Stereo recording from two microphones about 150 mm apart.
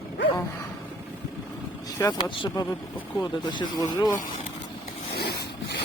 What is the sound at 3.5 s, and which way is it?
Speech, 30° left (ahead or behind).